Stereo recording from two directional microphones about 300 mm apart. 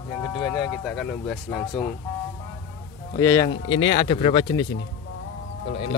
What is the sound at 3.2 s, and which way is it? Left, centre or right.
Speech, centre.